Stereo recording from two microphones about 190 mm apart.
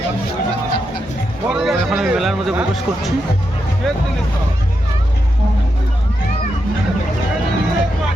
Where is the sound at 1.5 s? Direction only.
Centre (ahead or behind).